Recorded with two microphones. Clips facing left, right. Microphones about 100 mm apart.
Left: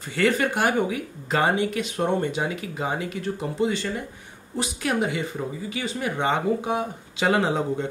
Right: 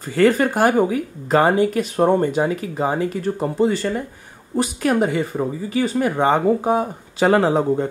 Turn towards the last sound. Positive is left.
turn(degrees=-45)  # may be behind; listen again after turning